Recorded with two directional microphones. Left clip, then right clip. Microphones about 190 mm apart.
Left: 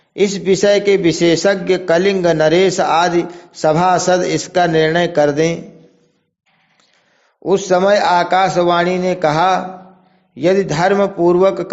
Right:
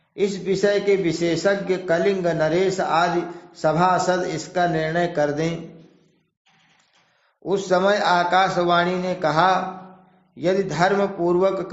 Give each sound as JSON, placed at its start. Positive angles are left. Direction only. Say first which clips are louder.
{"t": 0.2, "sound": "a man's voice", "louder": "left 7 dB", "side_deg": 45}
{"t": 7.4, "sound": "a man's voice", "louder": "left 6 dB", "side_deg": 35}